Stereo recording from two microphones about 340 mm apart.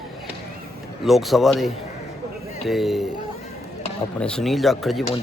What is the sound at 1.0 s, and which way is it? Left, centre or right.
Speech, centre.